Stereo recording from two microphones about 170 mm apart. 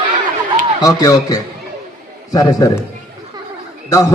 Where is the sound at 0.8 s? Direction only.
20° left (ahead or behind).